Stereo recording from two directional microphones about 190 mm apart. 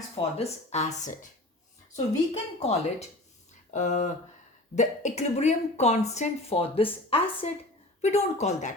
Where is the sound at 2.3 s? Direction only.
35° left (ahead or behind).